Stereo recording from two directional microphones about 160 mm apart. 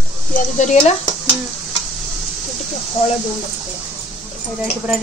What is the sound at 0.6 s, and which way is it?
Speech, 45° left (ahead or behind).